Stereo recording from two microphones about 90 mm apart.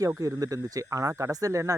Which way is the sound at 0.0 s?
40° right (ahead or behind).